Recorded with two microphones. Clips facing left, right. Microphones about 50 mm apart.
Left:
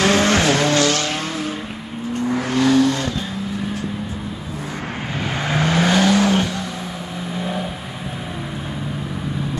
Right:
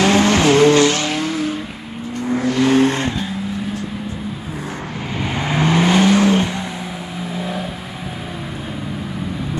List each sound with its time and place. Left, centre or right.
0.0 s vehicle: right
2.6 s vehicle: right
5.4 s vehicle: right
7.3 s vehicle: centre